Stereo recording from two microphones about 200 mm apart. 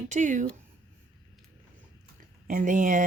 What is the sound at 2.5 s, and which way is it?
Speech, 40° right (ahead or behind).